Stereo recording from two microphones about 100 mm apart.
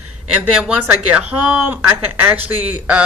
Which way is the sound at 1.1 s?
15° right (ahead or behind).